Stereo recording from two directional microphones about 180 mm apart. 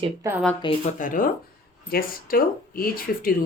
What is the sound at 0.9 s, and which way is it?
Speech, 45° left (ahead or behind).